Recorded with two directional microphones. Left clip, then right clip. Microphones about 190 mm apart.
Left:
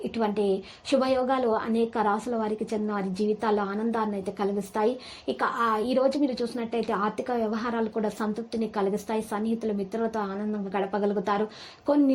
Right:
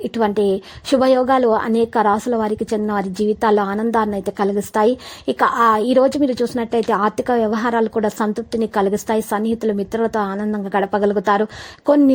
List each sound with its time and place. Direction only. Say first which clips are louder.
0.1 s a woman's voice: right 9 dB; 45° right (ahead or behind)